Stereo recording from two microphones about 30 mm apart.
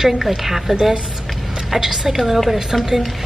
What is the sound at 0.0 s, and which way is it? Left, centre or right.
A woman's voice, centre.